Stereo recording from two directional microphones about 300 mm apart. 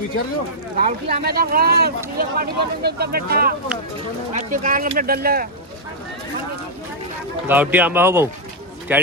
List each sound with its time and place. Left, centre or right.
0.8 s speech: right
7.4 s a man's voice: centre